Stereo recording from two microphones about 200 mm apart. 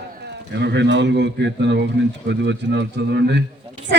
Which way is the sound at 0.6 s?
60° right (ahead or behind).